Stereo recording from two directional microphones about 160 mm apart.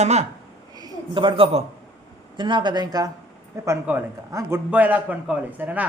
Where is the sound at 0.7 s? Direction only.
25° right (ahead or behind).